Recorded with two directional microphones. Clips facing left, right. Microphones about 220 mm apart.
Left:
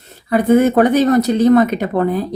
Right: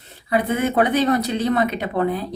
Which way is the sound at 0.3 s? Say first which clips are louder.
Left 9 dB; 45° left (ahead or behind).